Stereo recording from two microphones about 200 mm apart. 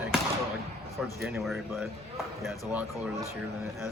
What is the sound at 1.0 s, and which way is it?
Speech, 5° right (ahead or behind).